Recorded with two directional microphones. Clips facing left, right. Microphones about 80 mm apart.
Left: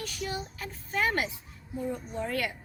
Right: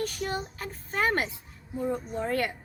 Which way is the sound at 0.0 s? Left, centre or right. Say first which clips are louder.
Right 4 dB; right.